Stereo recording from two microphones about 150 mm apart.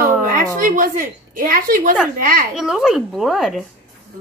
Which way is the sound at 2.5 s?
5° right (ahead or behind).